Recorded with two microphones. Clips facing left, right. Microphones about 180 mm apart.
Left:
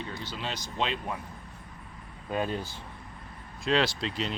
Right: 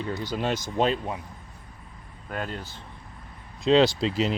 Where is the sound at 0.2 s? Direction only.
45° right (ahead or behind).